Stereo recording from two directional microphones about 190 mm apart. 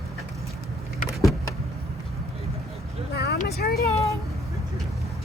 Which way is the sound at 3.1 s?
60° left (ahead or behind).